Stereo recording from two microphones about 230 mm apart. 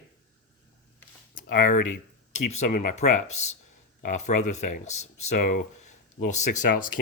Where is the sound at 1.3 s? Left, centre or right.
Left.